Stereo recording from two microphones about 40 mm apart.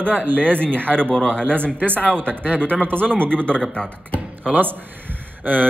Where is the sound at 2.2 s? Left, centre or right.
Right.